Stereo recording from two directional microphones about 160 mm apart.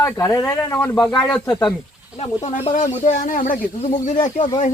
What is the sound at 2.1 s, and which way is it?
Speech, 40° left (ahead or behind).